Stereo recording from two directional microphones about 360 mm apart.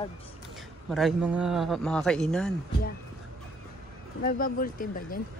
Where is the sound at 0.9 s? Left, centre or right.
Centre.